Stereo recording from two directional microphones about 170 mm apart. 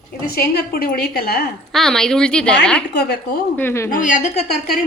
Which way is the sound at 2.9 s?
75° left (ahead or behind).